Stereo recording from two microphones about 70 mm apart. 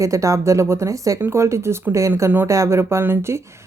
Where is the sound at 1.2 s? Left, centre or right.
Right.